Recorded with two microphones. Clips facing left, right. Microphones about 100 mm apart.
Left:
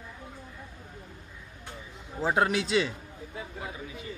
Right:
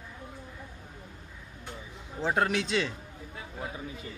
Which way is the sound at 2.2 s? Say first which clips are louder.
Left 2 dB; 5° left (ahead or behind).